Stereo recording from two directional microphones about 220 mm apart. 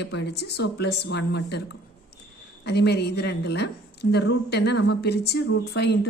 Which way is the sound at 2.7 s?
50° left (ahead or behind).